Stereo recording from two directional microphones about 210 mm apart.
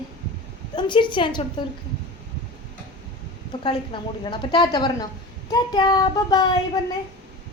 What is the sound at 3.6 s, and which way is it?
A woman's voice, 20° left (ahead or behind).